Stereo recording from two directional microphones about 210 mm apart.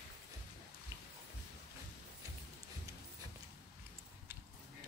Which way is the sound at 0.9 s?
15° right (ahead or behind).